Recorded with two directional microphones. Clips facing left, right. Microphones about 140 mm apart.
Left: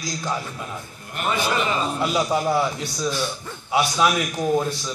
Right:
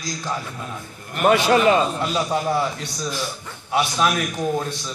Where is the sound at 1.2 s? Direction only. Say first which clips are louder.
Right 7 dB; 60° right (ahead or behind).